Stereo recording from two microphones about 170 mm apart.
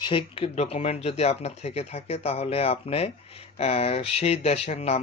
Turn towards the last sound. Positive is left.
turn(degrees=40)  # may be behind; listen again after turning